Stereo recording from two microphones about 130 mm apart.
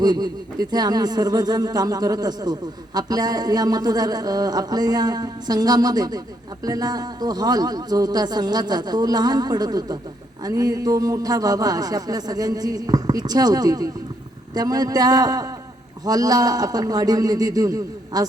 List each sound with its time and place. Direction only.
0.0 s speech: 30° right (ahead or behind)